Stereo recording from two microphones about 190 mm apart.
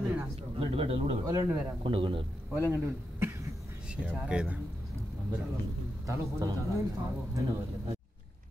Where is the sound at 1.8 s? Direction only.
25° right (ahead or behind).